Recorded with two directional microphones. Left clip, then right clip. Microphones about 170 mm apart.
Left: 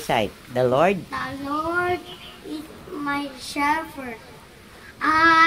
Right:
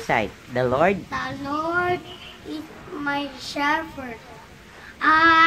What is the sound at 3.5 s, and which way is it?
Speech, 10° right (ahead or behind).